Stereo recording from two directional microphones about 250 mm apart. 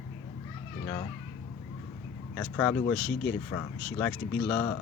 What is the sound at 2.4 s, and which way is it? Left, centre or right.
Speech, centre.